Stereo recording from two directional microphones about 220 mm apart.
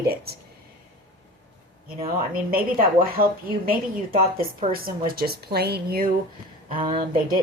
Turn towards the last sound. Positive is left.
turn(degrees=-40)  # may be behind; listen again after turning